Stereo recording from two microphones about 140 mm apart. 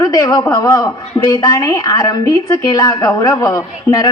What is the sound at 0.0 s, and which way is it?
A woman's voice, 25° left (ahead or behind).